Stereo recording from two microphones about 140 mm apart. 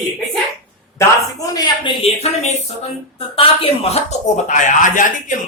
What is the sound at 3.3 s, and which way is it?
Speech, 45° left (ahead or behind).